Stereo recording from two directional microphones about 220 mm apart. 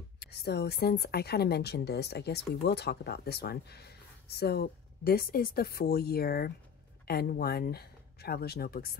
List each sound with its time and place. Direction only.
0.2 s speech: 45° left (ahead or behind)